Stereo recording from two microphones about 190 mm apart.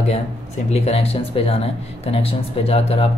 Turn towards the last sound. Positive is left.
turn(degrees=30)  # may be behind; listen again after turning